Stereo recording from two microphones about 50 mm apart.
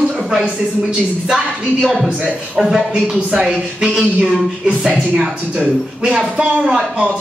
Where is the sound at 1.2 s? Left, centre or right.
Centre.